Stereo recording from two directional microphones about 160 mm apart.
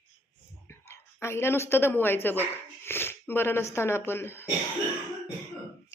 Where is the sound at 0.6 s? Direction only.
15° left (ahead or behind).